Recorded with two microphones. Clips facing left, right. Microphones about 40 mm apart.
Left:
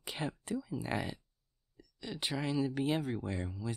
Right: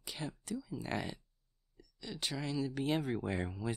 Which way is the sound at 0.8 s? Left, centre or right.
Centre.